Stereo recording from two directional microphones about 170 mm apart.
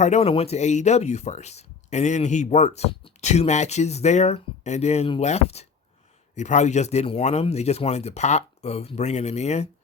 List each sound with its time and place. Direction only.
0.0 s speech: 40° left (ahead or behind)